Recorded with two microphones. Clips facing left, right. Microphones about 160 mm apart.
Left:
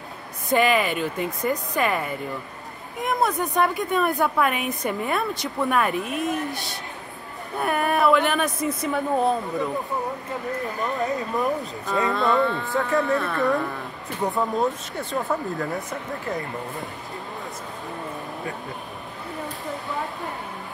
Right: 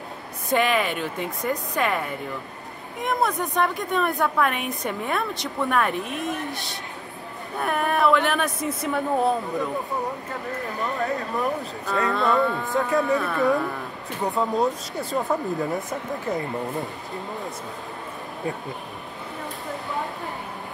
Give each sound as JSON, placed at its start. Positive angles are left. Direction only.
{"t": 0.5, "sound": "a woman's voice", "side_deg": 0}
{"t": 10.8, "sound": "speech", "side_deg": 20}
{"t": 11.9, "sound": "a woman's voice", "side_deg": 0}
{"t": 15.2, "sound": "speech", "side_deg": -20}